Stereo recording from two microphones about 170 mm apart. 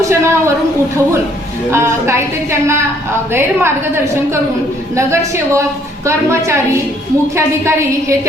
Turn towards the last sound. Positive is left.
turn(degrees=-15)  # may be behind; listen again after turning